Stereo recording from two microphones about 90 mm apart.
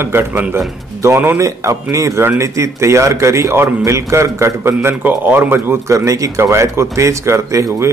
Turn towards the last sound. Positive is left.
turn(degrees=-35)  # may be behind; listen again after turning